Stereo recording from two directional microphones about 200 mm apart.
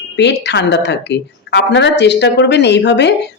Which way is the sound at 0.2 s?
60° left (ahead or behind).